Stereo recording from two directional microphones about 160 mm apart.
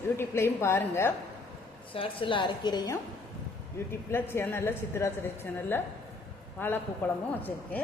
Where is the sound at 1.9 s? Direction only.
35° left (ahead or behind).